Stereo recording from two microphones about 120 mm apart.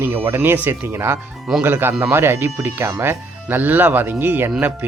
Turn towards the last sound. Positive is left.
turn(degrees=-15)  # may be behind; listen again after turning